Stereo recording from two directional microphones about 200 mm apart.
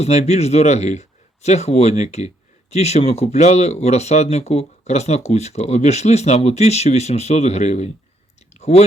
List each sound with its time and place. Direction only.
0.0 s speech: 35° left (ahead or behind)